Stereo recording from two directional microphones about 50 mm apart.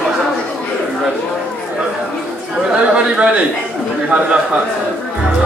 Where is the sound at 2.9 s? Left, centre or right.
Right.